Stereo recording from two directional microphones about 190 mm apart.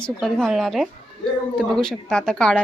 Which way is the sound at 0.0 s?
5° left (ahead or behind).